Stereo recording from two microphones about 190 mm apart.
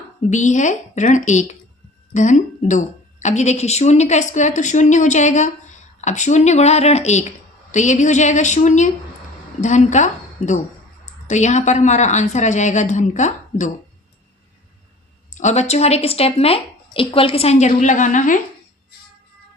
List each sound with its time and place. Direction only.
0.3 s a woman's voice: 40° left (ahead or behind)
15.4 s speech: 35° left (ahead or behind)